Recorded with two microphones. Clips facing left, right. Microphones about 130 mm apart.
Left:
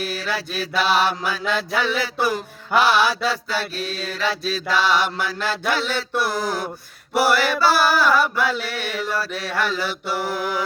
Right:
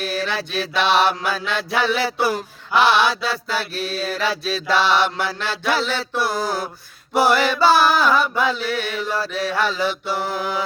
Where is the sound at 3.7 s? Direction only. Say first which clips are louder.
Right 2 dB; 40° left (ahead or behind).